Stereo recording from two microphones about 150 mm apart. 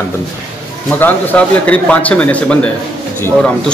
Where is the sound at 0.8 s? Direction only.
10° left (ahead or behind).